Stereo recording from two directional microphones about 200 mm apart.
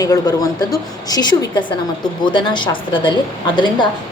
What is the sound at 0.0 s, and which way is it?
A woman's voice, 20° left (ahead or behind).